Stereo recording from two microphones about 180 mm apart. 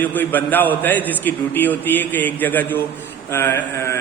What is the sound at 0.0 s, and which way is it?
A man's voice, 10° left (ahead or behind).